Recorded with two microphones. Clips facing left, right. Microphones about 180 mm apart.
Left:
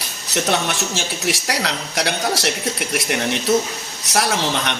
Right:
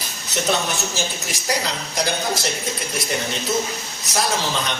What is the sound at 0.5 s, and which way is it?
Speech, 75° left (ahead or behind).